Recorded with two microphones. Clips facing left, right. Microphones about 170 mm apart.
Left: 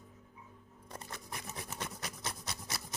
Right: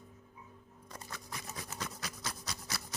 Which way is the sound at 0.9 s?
25° left (ahead or behind).